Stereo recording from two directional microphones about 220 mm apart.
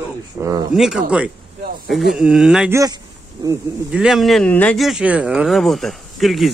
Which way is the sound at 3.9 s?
5° right (ahead or behind).